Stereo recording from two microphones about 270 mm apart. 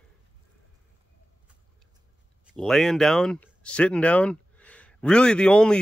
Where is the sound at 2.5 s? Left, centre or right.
Centre.